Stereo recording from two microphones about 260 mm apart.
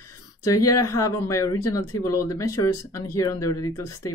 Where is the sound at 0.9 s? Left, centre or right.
Centre.